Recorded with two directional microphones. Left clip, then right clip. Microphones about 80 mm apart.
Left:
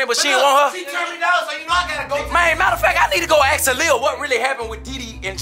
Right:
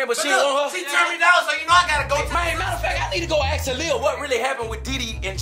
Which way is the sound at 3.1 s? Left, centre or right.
Left.